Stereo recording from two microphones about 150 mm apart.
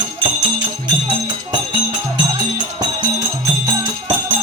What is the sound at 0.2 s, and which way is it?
Music, 35° right (ahead or behind).